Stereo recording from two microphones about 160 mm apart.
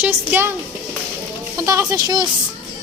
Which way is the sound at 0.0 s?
10° right (ahead or behind).